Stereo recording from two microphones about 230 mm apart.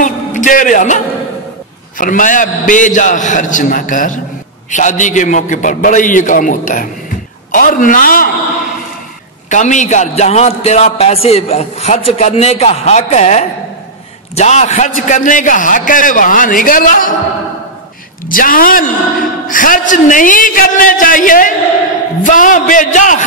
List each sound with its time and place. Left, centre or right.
0.0 s a sound: left
2.0 s a man's voice: left
9.5 s a man's voice: left
18.3 s a man's voice: left